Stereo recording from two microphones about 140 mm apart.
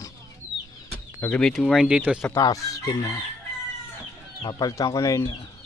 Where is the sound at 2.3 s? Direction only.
25° left (ahead or behind).